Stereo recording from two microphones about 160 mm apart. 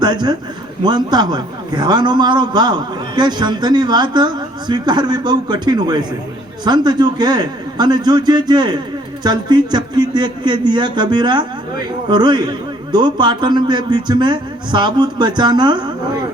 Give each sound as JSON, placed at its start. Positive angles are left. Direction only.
{"t": 0.0, "sound": "a man's voice", "side_deg": -25}